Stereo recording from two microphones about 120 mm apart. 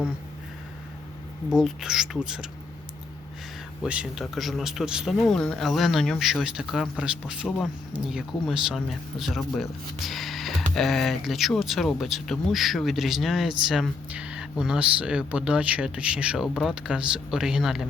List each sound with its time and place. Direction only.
1.5 s speech: 5° right (ahead or behind)
3.8 s speech: 10° right (ahead or behind)